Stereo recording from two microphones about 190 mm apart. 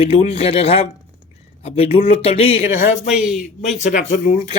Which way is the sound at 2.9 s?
5° right (ahead or behind).